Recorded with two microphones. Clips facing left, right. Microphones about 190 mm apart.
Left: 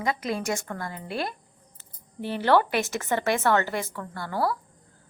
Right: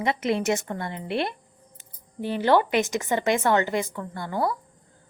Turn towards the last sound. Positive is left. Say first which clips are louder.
# right 1 dB
turn(degrees=-20)  # may be behind; listen again after turning